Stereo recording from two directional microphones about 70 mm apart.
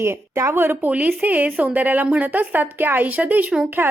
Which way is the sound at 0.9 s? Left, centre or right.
Right.